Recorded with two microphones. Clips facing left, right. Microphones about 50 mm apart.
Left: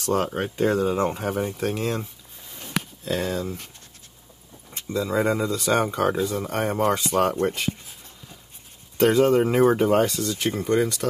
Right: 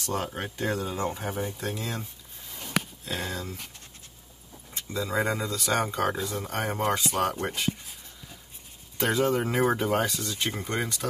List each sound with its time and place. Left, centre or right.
0.0 s speech: left
3.1 s speech: left
5.1 s speech: left
9.0 s speech: left